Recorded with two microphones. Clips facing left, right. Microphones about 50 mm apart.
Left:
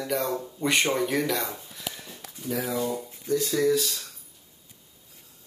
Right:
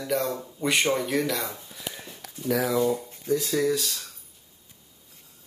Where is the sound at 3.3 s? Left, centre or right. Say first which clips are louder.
Left 1 dB; centre.